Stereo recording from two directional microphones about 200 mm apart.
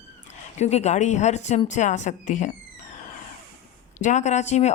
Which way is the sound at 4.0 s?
35° left (ahead or behind).